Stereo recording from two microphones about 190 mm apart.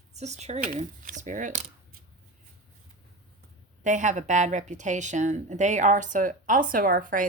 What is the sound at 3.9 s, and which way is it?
Speech, 40° right (ahead or behind).